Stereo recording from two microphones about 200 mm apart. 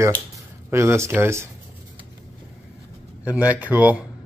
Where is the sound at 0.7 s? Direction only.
15° right (ahead or behind).